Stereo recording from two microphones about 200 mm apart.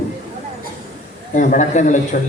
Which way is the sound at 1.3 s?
40° left (ahead or behind).